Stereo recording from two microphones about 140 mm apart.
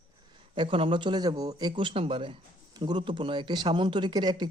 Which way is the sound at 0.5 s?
35° right (ahead or behind).